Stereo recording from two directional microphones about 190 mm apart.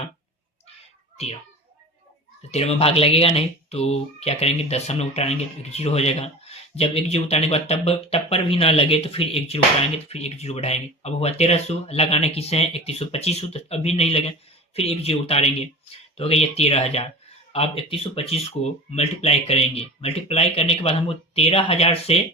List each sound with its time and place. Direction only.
1.1 s a child's voice: 35° left (ahead or behind)
2.5 s speech: 35° left (ahead or behind)